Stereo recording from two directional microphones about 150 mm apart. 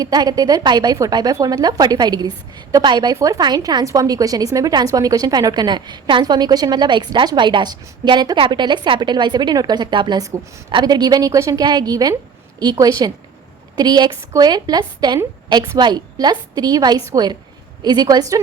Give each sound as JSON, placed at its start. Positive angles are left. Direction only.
{"t": 0.0, "sound": "a woman's voice", "side_deg": -25}